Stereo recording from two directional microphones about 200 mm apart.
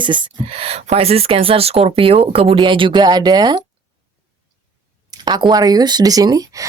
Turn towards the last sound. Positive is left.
turn(degrees=-15)  # may be behind; listen again after turning